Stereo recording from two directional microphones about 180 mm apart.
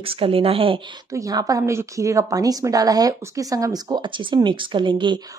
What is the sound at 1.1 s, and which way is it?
A woman's voice, 20° right (ahead or behind).